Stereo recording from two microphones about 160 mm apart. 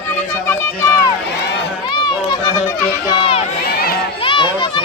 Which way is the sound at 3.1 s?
35° left (ahead or behind).